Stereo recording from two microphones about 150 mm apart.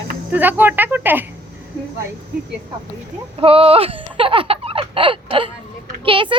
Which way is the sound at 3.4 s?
40° right (ahead or behind).